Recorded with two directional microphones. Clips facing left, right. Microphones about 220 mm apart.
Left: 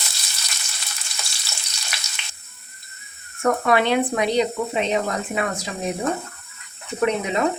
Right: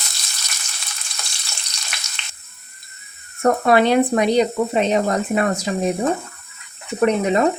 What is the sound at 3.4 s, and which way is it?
A woman's voice, 35° right (ahead or behind).